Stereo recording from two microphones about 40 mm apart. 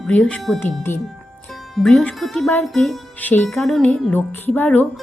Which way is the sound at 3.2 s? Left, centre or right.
Left.